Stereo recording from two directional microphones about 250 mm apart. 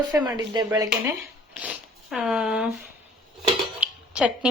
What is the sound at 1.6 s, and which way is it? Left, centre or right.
Speech, centre.